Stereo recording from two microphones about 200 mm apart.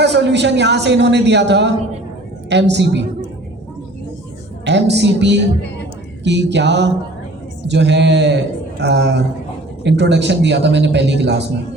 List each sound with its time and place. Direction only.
0.0 s a man's voice: 60° right (ahead or behind)
4.6 s a man's voice: 60° right (ahead or behind)